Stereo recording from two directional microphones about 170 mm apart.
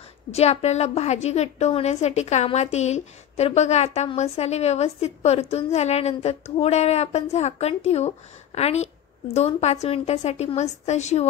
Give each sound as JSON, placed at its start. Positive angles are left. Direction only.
{"t": 0.3, "sound": "a woman's voice", "side_deg": 40}